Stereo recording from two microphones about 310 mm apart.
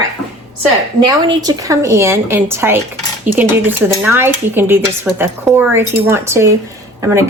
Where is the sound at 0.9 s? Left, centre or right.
Centre.